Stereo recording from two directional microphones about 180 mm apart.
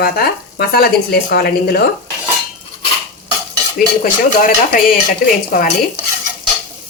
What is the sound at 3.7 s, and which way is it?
Speech, 50° left (ahead or behind).